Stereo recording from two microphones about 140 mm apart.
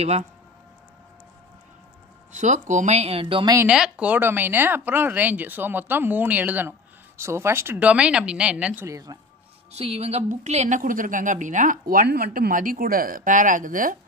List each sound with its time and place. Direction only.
2.3 s speech: 60° right (ahead or behind); by 3.5 s 40° right (ahead or behind)
3.6 s speech: 5° right (ahead or behind)
8.8 s speech: 25° right (ahead or behind)
9.7 s speech: 45° right (ahead or behind); by 13.9 s 75° right (ahead or behind)